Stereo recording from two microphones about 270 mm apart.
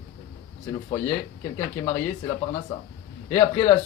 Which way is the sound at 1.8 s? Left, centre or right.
Centre.